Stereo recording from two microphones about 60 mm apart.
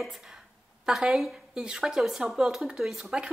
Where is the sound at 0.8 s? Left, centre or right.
Centre.